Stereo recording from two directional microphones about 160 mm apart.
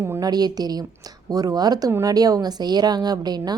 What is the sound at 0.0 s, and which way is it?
A woman's voice, 20° right (ahead or behind).